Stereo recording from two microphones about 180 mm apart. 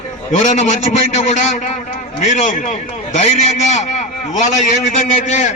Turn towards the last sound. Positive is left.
turn(degrees=40)  # may be behind; listen again after turning